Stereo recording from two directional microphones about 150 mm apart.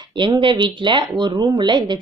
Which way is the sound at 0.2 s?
35° right (ahead or behind).